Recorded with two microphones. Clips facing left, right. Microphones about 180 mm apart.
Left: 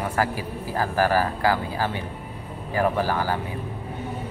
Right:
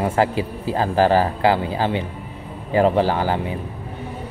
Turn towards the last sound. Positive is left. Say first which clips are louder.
# right 4 dB
turn(degrees=-20)  # may be behind; listen again after turning